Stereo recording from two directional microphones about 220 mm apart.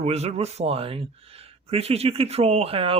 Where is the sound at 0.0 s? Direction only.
30° right (ahead or behind).